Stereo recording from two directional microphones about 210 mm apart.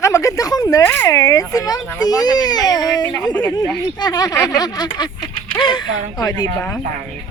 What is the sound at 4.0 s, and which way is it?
Speech, 20° left (ahead or behind).